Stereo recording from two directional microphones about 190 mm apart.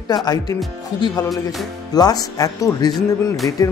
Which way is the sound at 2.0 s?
20° left (ahead or behind).